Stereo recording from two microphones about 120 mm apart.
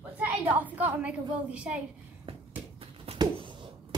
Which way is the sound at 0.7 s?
10° right (ahead or behind).